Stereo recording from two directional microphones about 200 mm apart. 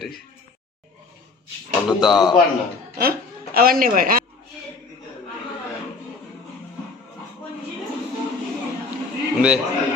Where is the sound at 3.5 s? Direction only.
45° right (ahead or behind).